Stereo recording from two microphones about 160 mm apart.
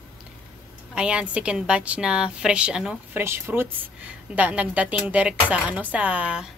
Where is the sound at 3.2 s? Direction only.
15° right (ahead or behind).